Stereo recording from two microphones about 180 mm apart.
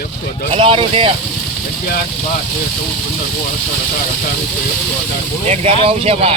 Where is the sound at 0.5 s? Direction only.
30° right (ahead or behind).